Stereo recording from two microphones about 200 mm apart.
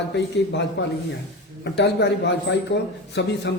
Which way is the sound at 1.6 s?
60° left (ahead or behind).